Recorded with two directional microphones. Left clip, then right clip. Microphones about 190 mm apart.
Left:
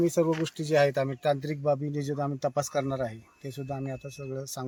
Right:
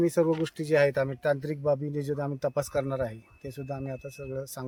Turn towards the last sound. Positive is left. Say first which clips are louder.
# even
turn(degrees=-5)  # may be behind; listen again after turning